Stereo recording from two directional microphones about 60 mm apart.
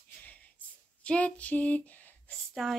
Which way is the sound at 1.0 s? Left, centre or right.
Left.